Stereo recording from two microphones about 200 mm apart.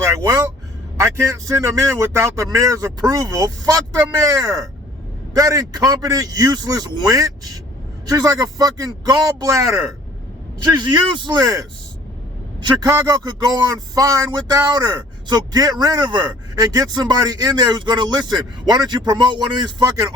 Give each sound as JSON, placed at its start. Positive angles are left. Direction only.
{"t": 0.0, "sound": "a man's voice", "side_deg": -15}
{"t": 10.8, "sound": "a man's voice", "side_deg": -20}
{"t": 12.6, "sound": "a man's voice", "side_deg": -15}